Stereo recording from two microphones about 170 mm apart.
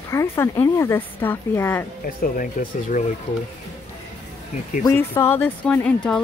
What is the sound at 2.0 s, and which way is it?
Speech, 55° left (ahead or behind).